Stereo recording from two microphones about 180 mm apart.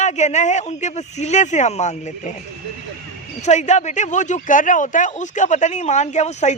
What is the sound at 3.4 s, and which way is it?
Speech, 40° left (ahead or behind).